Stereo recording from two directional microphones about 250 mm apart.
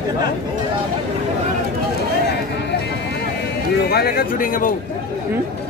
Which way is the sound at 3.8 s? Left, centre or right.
Left.